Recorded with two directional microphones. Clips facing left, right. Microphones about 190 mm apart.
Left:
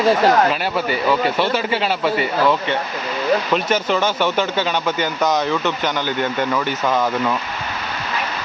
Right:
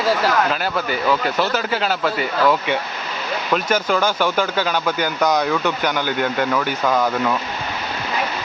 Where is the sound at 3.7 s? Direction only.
10° right (ahead or behind).